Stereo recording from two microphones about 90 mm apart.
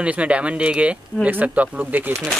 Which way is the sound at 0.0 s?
15° right (ahead or behind).